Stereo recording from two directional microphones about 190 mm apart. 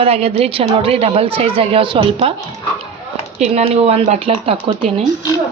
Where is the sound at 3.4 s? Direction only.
35° right (ahead or behind).